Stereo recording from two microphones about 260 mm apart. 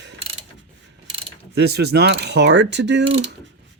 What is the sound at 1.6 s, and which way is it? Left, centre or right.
Mechanisms, right.